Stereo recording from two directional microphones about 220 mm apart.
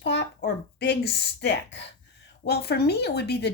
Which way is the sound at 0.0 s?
50° left (ahead or behind).